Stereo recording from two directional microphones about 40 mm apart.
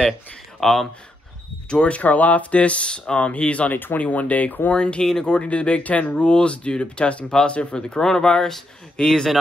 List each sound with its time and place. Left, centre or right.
0.6 s speech: centre
1.7 s speech: left
3.7 s speech: left
4.0 s speech: left
4.7 s speech: left
7.2 s speech: centre